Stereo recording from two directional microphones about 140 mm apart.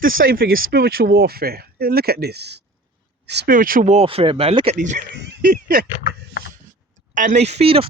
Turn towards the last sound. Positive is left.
turn(degrees=-45)  # may be behind; listen again after turning